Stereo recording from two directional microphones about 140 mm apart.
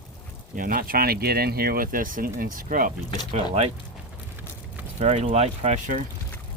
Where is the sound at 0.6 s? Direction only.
90° right.